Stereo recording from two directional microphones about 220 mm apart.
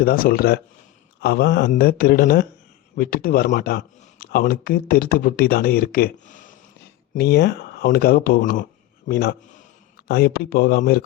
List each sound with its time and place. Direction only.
0.0 s a man's voice: 40° left (ahead or behind)